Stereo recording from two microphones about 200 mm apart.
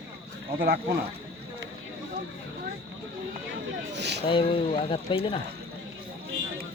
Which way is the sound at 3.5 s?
60° right (ahead or behind).